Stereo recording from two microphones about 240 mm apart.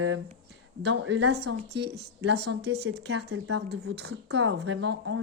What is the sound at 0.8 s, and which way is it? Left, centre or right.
Speech, right.